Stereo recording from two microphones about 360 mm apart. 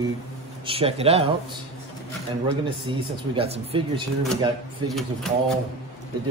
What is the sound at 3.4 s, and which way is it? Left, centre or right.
Speech, centre.